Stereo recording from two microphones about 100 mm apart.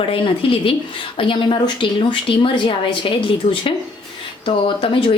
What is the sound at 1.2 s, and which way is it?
Speech, 55° left (ahead or behind).